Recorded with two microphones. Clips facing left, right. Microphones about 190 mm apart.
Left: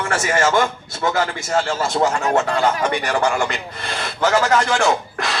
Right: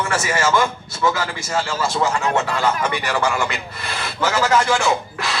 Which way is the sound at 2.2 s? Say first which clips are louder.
Left 2 dB; 40° left (ahead or behind).